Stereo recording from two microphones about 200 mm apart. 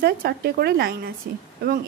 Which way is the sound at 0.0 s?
50° right (ahead or behind).